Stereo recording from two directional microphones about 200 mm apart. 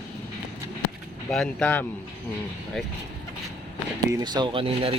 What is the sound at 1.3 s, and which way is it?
Speech, 5° left (ahead or behind).